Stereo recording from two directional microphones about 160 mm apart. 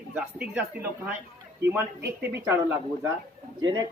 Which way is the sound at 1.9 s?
85° right.